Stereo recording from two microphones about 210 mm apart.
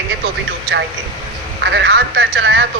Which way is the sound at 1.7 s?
55° right (ahead or behind).